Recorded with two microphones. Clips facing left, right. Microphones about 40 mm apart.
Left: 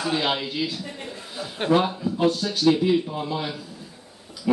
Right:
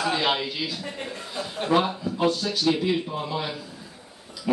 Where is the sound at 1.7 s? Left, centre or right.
Centre.